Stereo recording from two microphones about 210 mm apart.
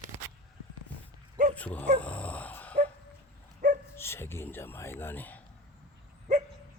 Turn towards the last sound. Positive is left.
turn(degrees=-35)  # may be behind; listen again after turning